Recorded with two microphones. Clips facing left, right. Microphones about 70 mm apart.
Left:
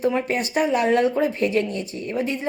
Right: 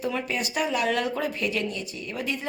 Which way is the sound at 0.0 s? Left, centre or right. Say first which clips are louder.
Left 6 dB; left.